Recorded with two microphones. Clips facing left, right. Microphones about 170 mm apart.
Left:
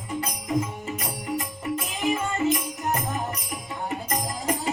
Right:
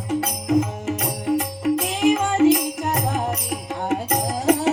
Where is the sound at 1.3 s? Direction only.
90° right.